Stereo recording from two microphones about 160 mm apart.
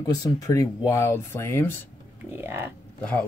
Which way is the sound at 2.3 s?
15° right (ahead or behind).